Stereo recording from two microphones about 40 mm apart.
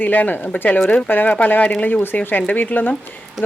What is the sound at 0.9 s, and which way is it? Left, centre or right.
Speech, left.